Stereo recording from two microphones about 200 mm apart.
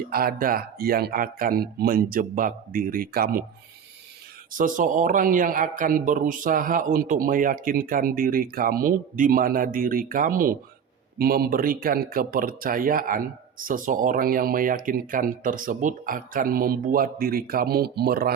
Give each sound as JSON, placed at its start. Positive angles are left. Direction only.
{"t": 0.1, "sound": "speech", "side_deg": -45}
{"t": 4.5, "sound": "speech", "side_deg": -40}